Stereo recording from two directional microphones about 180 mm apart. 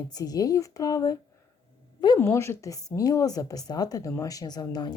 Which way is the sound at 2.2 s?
15° left (ahead or behind).